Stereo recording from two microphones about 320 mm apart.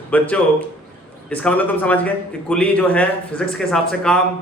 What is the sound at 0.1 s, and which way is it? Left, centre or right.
Speech, centre.